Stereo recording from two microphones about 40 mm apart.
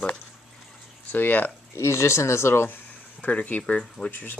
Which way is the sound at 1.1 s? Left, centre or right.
Left.